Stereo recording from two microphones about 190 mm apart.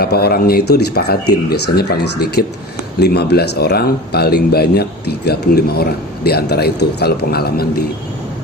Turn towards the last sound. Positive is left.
turn(degrees=55)  # may be behind; listen again after turning